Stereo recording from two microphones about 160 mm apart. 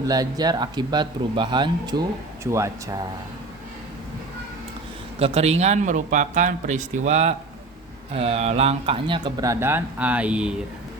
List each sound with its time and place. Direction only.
0.1 s speech: 25° right (ahead or behind)
5.2 s a man's voice: 40° right (ahead or behind); by 10.5 s 5° right (ahead or behind)